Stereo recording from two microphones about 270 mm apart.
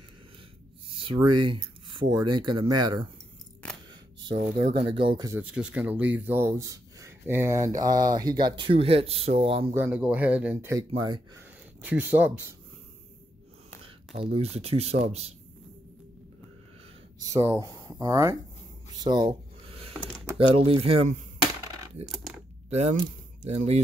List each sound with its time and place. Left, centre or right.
0.8 s speech: centre
3.9 s camera: centre
4.8 s speech: centre
9.8 s speech: centre
13.8 s speech: right
17.2 s speech: centre
18.9 s a sound: centre
20.3 s speech: right
23.4 s speech: right